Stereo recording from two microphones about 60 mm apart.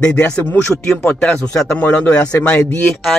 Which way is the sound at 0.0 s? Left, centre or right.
Centre.